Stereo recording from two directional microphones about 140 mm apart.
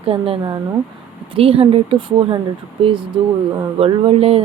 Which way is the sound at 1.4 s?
45° right (ahead or behind).